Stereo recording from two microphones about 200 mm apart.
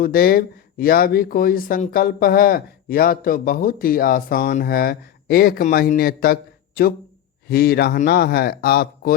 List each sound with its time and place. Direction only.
0.0 s speech: 50° left (ahead or behind)